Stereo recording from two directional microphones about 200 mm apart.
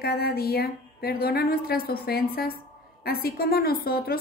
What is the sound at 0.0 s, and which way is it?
A woman's voice, 50° left (ahead or behind).